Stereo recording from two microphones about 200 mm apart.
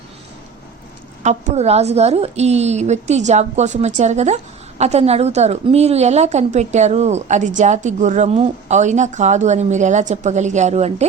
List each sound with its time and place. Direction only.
1.2 s a woman's voice: 35° right (ahead or behind)